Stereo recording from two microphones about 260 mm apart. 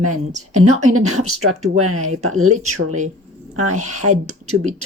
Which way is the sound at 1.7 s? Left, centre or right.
Right.